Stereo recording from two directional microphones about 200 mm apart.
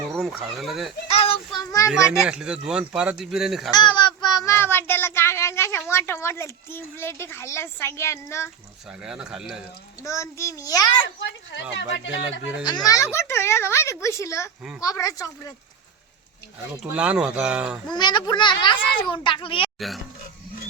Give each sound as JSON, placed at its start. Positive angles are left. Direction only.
{"t": 0.1, "sound": "speech", "side_deg": 0}
{"t": 1.0, "sound": "child singing", "side_deg": 30}
{"t": 1.5, "sound": "a woman's voice", "side_deg": 15}
{"t": 2.2, "sound": "speech", "side_deg": -5}
{"t": 3.7, "sound": "child singing", "side_deg": 20}
{"t": 9.0, "sound": "speech", "side_deg": -5}
{"t": 10.0, "sound": "a woman's voice", "side_deg": 15}
{"t": 12.6, "sound": "a woman's voice", "side_deg": 20}
{"t": 16.9, "sound": "speech", "side_deg": -5}
{"t": 17.9, "sound": "speech", "side_deg": 20}